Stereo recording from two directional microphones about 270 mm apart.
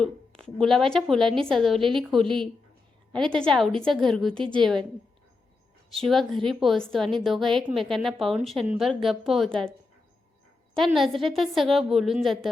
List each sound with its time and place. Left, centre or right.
0.0 s a woman's voice: centre
5.9 s a woman's voice: centre
10.8 s a woman's voice: centre